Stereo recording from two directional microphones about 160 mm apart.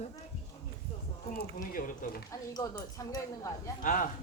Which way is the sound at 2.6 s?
20° left (ahead or behind).